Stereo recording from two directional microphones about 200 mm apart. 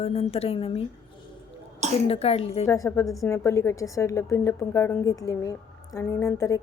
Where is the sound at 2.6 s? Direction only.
15° left (ahead or behind).